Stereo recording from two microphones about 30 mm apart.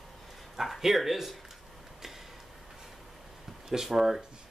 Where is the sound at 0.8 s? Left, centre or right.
Centre.